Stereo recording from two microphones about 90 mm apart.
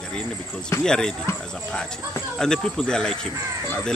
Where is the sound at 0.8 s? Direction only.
5° left (ahead or behind).